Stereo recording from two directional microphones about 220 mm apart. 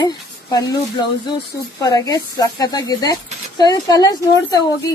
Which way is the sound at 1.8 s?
15° left (ahead or behind).